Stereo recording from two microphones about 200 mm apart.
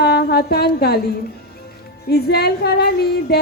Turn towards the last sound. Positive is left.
turn(degrees=55)  # may be behind; listen again after turning